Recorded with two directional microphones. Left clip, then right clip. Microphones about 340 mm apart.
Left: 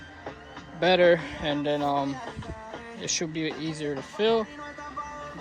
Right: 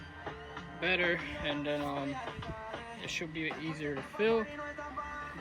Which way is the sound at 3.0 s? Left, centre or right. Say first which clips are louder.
Left 9 dB; centre.